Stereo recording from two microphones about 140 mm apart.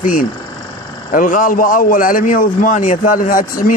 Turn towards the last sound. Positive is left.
turn(degrees=80)